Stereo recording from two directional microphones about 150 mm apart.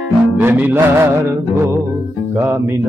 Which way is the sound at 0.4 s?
10° right (ahead or behind).